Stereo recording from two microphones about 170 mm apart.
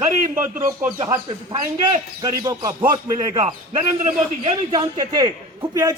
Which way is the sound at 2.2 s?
25° right (ahead or behind).